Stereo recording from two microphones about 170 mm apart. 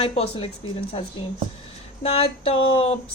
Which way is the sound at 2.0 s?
35° left (ahead or behind).